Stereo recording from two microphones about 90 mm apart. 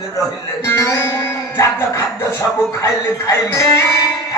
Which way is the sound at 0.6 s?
30° left (ahead or behind).